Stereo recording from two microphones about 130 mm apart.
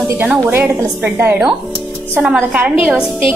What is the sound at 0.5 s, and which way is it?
Speech, 20° right (ahead or behind).